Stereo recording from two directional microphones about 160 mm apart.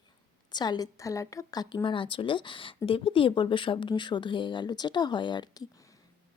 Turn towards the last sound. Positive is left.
turn(degrees=20)  # may be behind; listen again after turning